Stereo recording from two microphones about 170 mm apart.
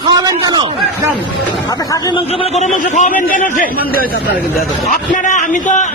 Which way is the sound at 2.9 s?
45° left (ahead or behind).